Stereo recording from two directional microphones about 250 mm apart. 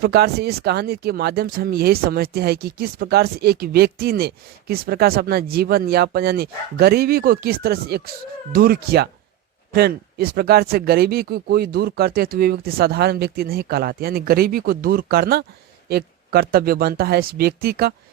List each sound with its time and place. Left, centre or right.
0.0 s speech: right